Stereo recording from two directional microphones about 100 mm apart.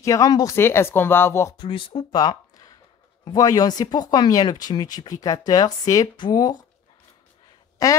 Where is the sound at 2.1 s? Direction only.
45° left (ahead or behind).